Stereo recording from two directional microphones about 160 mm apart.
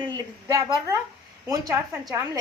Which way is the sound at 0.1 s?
20° right (ahead or behind).